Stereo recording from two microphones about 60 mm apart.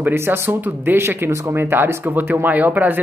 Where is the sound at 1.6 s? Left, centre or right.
Right.